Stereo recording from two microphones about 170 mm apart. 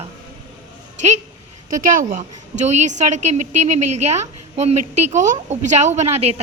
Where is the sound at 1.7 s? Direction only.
55° right (ahead or behind).